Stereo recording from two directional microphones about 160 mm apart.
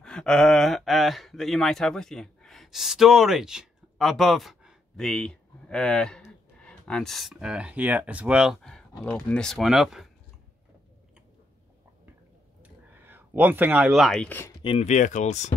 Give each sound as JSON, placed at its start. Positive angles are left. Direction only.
{"t": 0.0, "sound": "speech", "side_deg": 5}
{"t": 12.6, "sound": "speech", "side_deg": -10}
{"t": 14.6, "sound": "speech", "side_deg": 30}
{"t": 14.9, "sound": "speech", "side_deg": 50}